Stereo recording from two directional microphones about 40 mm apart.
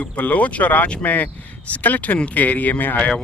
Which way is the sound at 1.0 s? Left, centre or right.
Left.